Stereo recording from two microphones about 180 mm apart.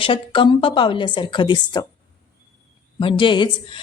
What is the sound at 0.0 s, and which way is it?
A woman's voice, 30° left (ahead or behind).